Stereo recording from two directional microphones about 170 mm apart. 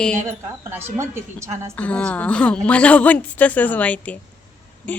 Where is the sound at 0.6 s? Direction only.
15° right (ahead or behind).